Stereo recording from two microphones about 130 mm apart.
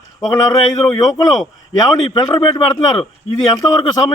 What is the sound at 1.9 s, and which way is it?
Speech, 30° left (ahead or behind).